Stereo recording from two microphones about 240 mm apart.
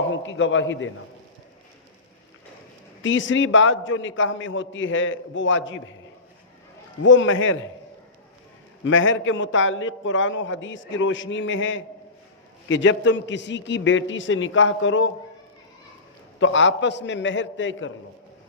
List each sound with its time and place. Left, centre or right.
0.1 s a man's voice: left
3.0 s a man's voice: left
7.0 s a man's voice: left
8.8 s a man's voice: left
16.4 s a man's voice: left